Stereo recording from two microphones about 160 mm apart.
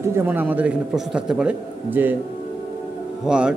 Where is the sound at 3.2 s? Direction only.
5° right (ahead or behind).